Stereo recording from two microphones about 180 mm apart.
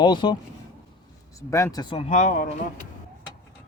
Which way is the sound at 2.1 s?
45° left (ahead or behind).